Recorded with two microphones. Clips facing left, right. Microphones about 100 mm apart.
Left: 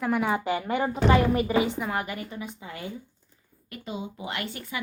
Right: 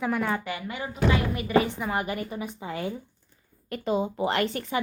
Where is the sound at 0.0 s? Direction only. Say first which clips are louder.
Left 1 dB; 5° left (ahead or behind).